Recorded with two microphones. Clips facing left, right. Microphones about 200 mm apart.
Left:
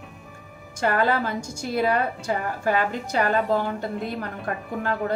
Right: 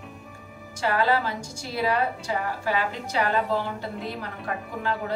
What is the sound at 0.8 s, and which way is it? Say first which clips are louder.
A woman's voice: left 1 dB; 50° left (ahead or behind).